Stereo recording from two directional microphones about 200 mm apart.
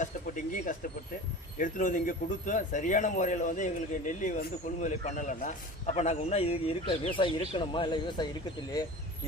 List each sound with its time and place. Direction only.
0.0 s a man's voice: 40° left (ahead or behind); by 8.3 s 25° left (ahead or behind)